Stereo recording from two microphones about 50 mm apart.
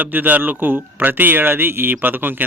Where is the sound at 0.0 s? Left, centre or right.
Right.